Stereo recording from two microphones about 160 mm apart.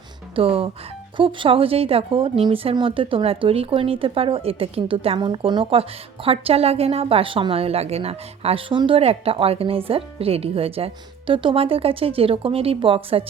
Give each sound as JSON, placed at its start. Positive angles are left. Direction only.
{"t": 0.3, "sound": "a woman's voice", "side_deg": -35}